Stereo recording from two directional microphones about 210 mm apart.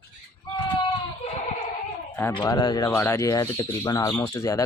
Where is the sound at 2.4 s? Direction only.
20° left (ahead or behind).